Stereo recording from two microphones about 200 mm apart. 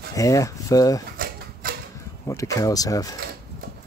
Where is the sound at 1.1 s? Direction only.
45° right (ahead or behind).